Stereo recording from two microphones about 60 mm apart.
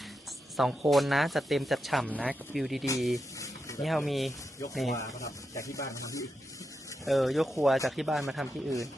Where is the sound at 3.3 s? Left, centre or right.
Left.